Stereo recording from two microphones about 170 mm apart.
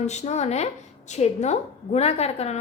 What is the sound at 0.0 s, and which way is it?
A woman's voice, 40° left (ahead or behind).